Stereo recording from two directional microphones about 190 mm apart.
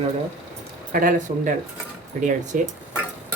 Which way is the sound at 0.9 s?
45° right (ahead or behind).